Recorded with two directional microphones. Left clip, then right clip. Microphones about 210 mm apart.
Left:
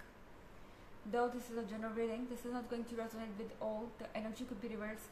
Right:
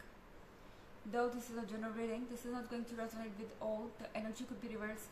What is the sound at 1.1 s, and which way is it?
A woman's voice, 15° left (ahead or behind).